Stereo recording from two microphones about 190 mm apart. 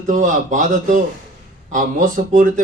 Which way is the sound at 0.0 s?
40° right (ahead or behind).